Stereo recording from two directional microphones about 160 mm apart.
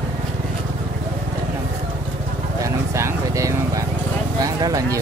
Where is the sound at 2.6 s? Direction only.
20° right (ahead or behind).